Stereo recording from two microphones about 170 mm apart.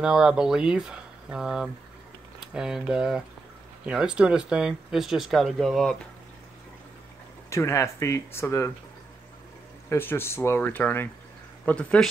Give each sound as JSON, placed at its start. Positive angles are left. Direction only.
{"t": 0.0, "sound": "speech", "side_deg": -5}
{"t": 7.4, "sound": "speech", "side_deg": 15}
{"t": 9.8, "sound": "speech", "side_deg": 15}